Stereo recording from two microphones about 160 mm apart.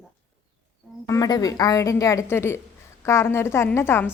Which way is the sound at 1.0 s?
20° left (ahead or behind).